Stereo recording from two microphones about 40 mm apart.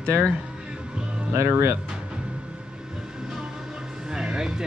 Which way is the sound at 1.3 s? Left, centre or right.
Right.